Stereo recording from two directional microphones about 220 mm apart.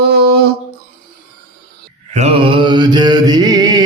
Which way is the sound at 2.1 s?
25° right (ahead or behind).